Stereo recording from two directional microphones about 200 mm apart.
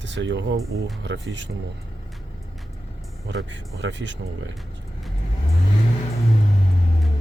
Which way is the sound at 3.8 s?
65° right (ahead or behind).